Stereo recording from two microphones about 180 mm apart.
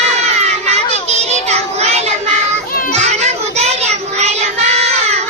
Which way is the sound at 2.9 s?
40° right (ahead or behind).